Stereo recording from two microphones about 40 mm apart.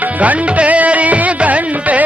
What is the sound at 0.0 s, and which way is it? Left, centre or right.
Music, right.